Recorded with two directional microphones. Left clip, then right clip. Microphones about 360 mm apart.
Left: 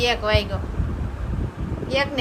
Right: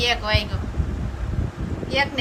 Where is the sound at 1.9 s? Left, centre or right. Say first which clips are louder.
Even; centre.